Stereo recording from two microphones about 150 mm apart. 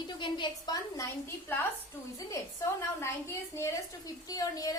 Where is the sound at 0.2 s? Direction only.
30° left (ahead or behind).